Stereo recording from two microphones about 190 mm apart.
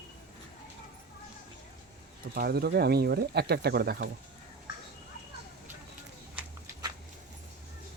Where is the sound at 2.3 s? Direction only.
55° right (ahead or behind).